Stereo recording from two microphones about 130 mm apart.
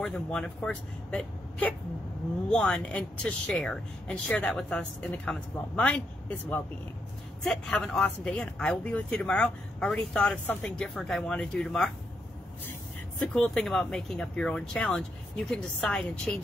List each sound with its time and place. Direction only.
0.0 s speech: 5° left (ahead or behind)
13.2 s speech: 5° left (ahead or behind)